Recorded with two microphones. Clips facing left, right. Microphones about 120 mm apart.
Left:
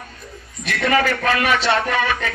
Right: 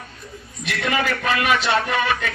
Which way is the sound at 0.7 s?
40° left (ahead or behind).